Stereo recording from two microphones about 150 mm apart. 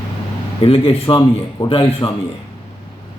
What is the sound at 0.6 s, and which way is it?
A man's voice, 40° left (ahead or behind).